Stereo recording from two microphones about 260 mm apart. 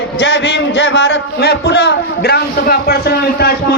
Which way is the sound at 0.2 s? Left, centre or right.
Left.